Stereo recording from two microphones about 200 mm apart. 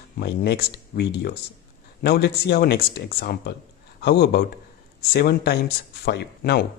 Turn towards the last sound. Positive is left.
turn(degrees=55)  # may be behind; listen again after turning